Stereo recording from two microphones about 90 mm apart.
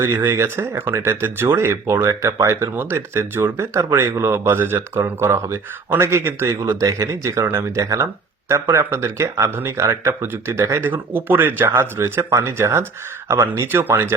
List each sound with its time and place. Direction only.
0.0 s speech: 30° right (ahead or behind)